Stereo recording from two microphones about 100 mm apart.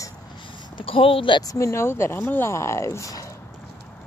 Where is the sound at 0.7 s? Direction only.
65° left (ahead or behind).